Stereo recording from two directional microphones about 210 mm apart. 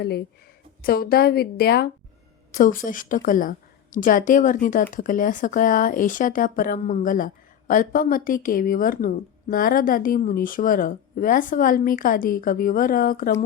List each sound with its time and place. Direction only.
0.0 s a woman's voice: 50° left (ahead or behind)